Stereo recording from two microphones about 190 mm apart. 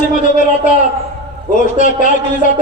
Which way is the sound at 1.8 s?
40° left (ahead or behind).